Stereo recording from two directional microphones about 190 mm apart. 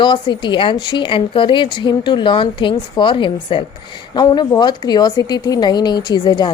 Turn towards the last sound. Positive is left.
turn(degrees=20)  # may be behind; listen again after turning